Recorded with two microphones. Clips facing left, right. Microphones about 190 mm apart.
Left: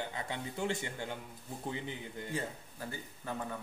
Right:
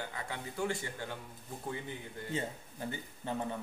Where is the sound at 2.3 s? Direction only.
20° right (ahead or behind).